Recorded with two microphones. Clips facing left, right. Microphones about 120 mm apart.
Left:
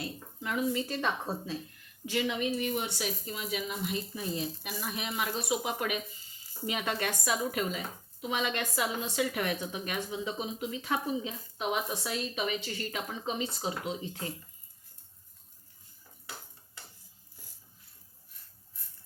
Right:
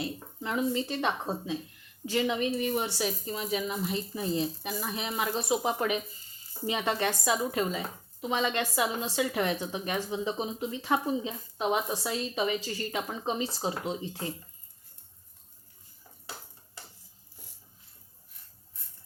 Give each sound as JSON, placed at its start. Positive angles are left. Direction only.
{"t": 0.0, "sound": "speech", "side_deg": -30}
{"t": 2.0, "sound": "speech", "side_deg": -35}